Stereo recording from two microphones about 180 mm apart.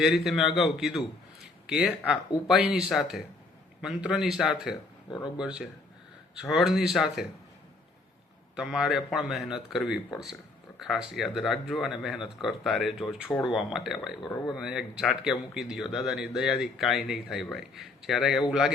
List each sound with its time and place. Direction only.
0.0 s speech: centre (ahead or behind)
4.7 s speech: 25° left (ahead or behind)
5.4 s speech: 5° right (ahead or behind)
8.5 s speech: 5° right (ahead or behind)